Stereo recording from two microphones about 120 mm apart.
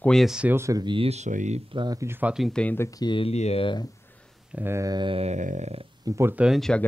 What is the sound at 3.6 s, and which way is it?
Speech, 40° left (ahead or behind).